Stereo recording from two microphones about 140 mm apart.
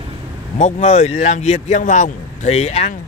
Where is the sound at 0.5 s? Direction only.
60° left (ahead or behind).